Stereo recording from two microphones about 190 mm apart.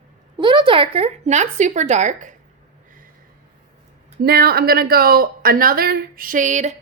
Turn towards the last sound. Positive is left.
turn(degrees=-40)  # may be behind; listen again after turning